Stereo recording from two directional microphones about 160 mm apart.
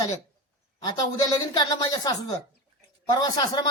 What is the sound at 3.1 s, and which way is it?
Speech, 25° left (ahead or behind).